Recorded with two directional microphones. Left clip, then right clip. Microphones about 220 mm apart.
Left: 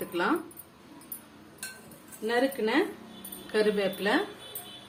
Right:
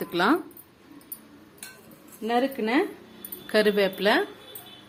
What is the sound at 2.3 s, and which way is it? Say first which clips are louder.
Speech: right 2 dB; 30° right (ahead or behind).